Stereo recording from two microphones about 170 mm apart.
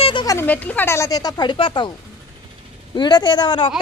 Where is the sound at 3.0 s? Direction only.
25° left (ahead or behind).